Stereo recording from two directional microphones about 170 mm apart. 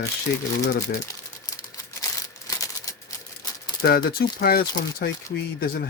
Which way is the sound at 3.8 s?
65° left (ahead or behind).